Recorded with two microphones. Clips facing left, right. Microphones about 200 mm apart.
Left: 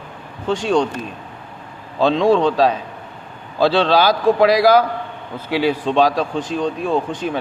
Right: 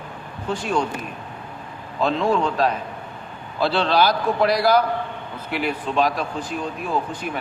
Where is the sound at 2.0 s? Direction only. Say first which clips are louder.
Left 6 dB; 90° left.